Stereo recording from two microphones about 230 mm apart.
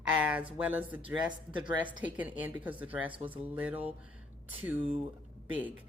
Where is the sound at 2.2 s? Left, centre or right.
Centre.